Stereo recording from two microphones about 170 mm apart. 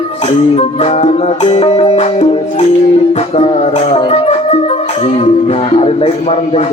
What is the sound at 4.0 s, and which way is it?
Music, 40° left (ahead or behind).